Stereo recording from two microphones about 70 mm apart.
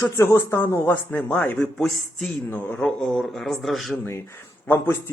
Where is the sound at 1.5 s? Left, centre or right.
Centre.